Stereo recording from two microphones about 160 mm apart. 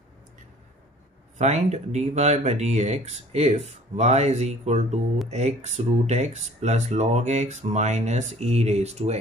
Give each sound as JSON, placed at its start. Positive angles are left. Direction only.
{"t": 1.4, "sound": "speech", "side_deg": -45}